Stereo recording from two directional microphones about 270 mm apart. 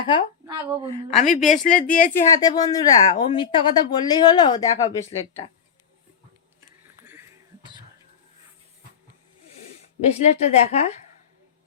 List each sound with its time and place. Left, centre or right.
0.0 s a woman's voice: centre
2.1 s speech: centre
7.0 s a sound: centre
10.0 s a woman's voice: left